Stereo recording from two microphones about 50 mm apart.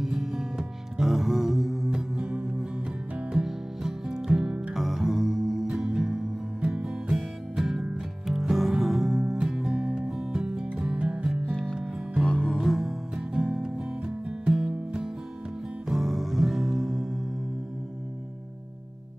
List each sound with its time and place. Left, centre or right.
0.0 s music: centre
12.3 s music: centre
12.5 s music: centre
13.3 s music: centre
15.9 s music: centre